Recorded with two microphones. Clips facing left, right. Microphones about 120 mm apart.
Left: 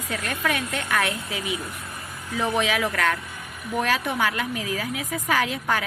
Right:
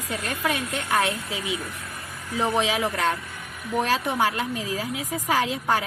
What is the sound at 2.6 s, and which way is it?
Speech, 30° right (ahead or behind).